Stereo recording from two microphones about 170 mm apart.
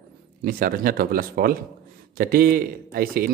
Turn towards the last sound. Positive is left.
turn(degrees=-60)  # may be behind; listen again after turning